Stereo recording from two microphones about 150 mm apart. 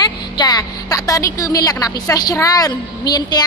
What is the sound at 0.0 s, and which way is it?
A woman's voice, 25° left (ahead or behind).